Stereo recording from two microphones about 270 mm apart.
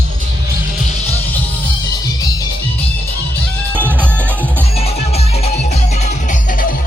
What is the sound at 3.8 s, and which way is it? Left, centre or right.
Music, centre.